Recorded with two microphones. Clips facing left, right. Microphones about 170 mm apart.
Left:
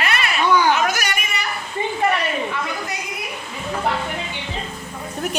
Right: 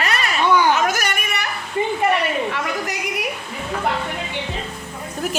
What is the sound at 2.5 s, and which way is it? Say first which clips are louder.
Speech: right 2 dB; 80° right.